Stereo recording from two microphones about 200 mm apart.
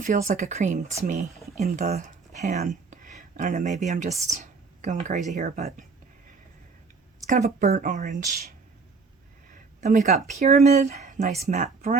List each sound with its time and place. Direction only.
0.0 s a woman's voice: 40° right (ahead or behind)
7.3 s a woman's voice: 35° right (ahead or behind)